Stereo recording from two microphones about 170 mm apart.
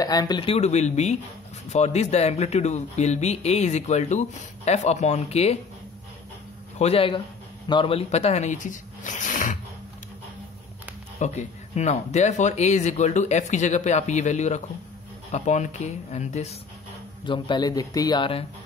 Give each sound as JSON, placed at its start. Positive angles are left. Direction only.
{"t": 0.0, "sound": "speech", "side_deg": 20}
{"t": 6.8, "sound": "speech", "side_deg": 35}
{"t": 11.1, "sound": "speech", "side_deg": 45}
{"t": 17.2, "sound": "a man's voice", "side_deg": 25}